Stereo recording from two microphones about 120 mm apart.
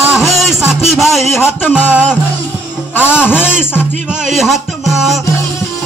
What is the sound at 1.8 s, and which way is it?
A man's voice, 15° left (ahead or behind).